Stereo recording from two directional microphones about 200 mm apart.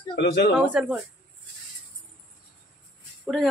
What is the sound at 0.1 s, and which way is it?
Speech, 50° left (ahead or behind).